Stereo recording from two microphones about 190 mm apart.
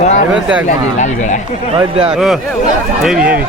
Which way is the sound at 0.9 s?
40° left (ahead or behind).